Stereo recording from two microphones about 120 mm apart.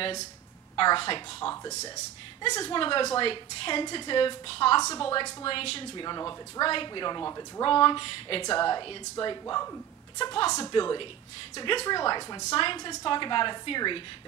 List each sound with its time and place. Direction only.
0.7 s a woman's voice: 45° left (ahead or behind)
1.5 s speech: 25° left (ahead or behind)
2.8 s a woman's voice: 45° left (ahead or behind)
4.7 s speech: 35° left (ahead or behind)
5.0 s a woman's voice: 45° left (ahead or behind)
6.0 s speech: 35° left (ahead or behind)
7.2 s speech: 25° left (ahead or behind)
7.6 s a woman's voice: 40° left (ahead or behind)
8.5 s a woman's voice: 35° left (ahead or behind)